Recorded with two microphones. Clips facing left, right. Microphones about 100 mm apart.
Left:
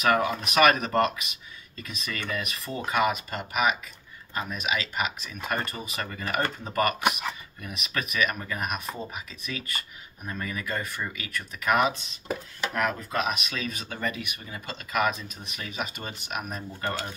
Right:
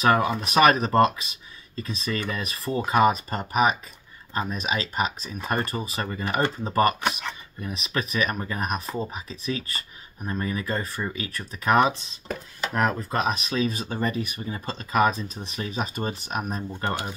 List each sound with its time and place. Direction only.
0.0 s speech: 30° right (ahead or behind)
7.0 s speech: 5° left (ahead or behind)
7.6 s speech: 30° right (ahead or behind)
16.8 s speech: 15° right (ahead or behind)